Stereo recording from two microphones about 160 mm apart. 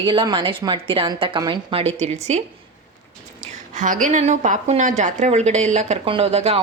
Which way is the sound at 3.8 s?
55° right (ahead or behind).